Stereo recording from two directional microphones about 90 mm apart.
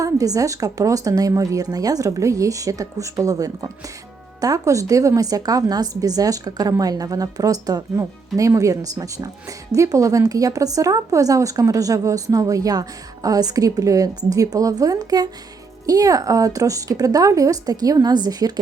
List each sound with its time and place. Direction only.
0.0 s speech: 40° right (ahead or behind)